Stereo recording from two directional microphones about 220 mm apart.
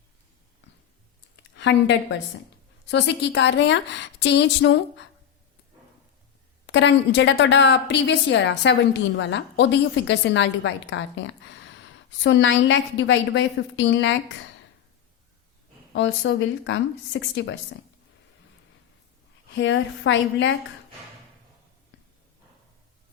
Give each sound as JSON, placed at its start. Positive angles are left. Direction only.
{"t": 1.5, "sound": "a woman's voice", "side_deg": 55}
{"t": 6.7, "sound": "a woman's voice", "side_deg": 55}
{"t": 15.9, "sound": "a woman's voice", "side_deg": 60}
{"t": 19.5, "sound": "a woman's voice", "side_deg": 55}